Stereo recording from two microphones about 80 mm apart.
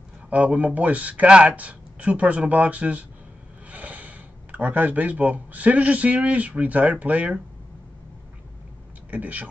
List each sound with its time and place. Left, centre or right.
0.3 s speech: centre
9.1 s speech: centre